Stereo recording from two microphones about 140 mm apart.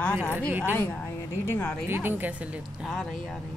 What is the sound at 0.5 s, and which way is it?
Speech, 15° right (ahead or behind).